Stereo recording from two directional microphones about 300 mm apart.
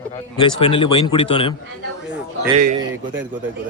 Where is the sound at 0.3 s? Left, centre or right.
Centre.